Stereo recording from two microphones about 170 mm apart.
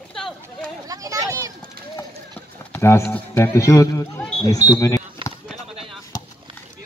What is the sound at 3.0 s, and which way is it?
Speech, 10° left (ahead or behind).